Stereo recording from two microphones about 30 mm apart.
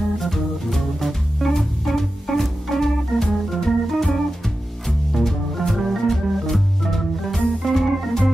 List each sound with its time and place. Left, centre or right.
0.2 s music: centre
3.1 s organ: left
3.4 s organ: centre
4.8 s music: centre
6.5 s organ: centre